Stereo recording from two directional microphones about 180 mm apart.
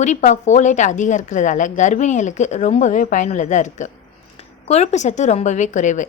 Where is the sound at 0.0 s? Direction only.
40° left (ahead or behind).